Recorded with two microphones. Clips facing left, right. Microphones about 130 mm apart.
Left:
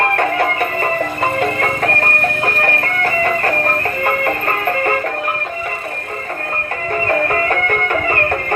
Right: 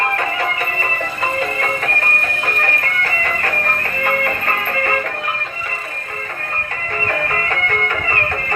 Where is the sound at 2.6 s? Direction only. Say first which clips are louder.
Left 4 dB; 40° left (ahead or behind).